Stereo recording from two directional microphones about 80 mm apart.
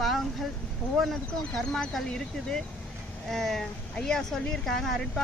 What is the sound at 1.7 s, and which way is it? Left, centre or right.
Speech, centre.